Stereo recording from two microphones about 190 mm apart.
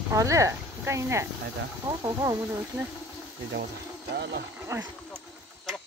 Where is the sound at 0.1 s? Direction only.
15° right (ahead or behind).